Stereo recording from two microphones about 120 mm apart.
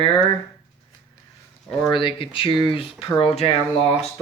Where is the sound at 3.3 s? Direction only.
60° left (ahead or behind).